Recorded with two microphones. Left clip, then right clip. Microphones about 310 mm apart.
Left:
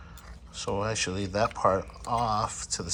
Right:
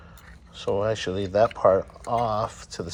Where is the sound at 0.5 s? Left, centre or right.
Centre.